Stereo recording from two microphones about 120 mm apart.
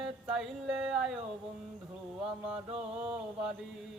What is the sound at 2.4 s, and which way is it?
Mantra, 5° right (ahead or behind).